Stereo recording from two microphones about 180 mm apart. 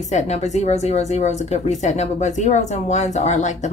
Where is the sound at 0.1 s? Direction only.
40° left (ahead or behind).